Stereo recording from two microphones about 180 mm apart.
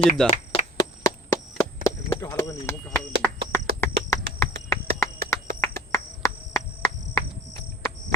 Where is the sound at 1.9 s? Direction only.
15° left (ahead or behind).